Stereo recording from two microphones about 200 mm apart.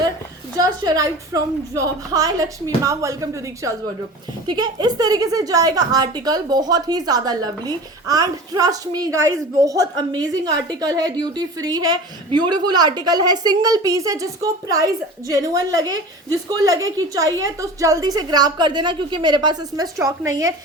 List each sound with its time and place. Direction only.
0.5 s a woman's voice: 20° right (ahead or behind)